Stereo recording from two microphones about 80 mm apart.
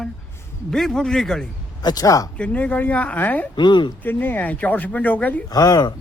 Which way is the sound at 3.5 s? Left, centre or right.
Left.